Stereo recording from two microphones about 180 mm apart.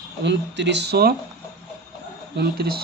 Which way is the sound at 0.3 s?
75° right (ahead or behind).